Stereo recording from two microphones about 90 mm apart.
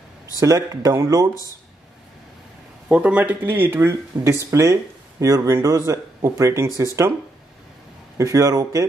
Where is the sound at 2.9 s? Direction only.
15° right (ahead or behind); by 6.9 s 35° right (ahead or behind).